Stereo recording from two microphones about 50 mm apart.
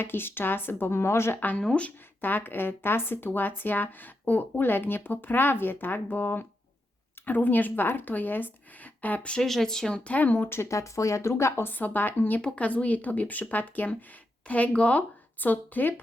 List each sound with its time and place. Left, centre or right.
0.0 s speech: left
1.5 s speech: left
2.2 s speech: left
9.4 s speech: centre
10.0 s speech: left
10.6 s speech: left
11.7 s speech: left
15.4 s speech: left